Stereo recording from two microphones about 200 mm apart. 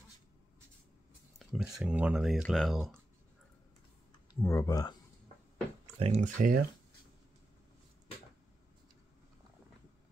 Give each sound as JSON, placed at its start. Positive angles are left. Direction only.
{"t": 1.4, "sound": "speech", "side_deg": 0}
{"t": 4.3, "sound": "speech", "side_deg": 15}
{"t": 5.9, "sound": "speech", "side_deg": -30}